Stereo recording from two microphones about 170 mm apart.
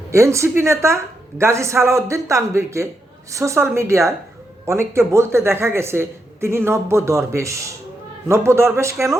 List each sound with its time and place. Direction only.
0.1 s a man's voice: 15° right (ahead or behind)